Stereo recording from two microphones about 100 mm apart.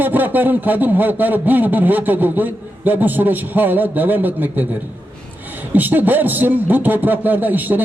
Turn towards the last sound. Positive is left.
turn(degrees=-20)  # may be behind; listen again after turning